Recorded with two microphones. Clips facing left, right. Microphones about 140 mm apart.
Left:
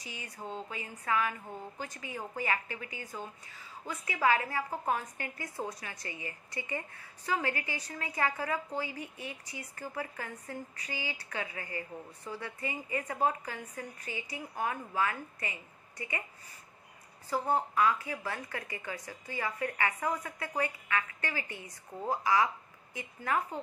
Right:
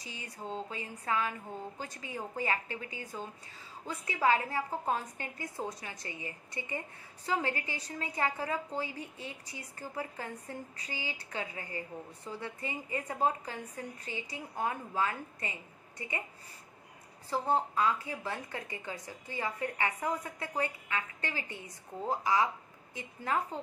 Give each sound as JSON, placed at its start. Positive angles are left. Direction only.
{"t": 0.2, "sound": "a woman's voice", "side_deg": -30}
{"t": 17.3, "sound": "a woman's voice", "side_deg": -25}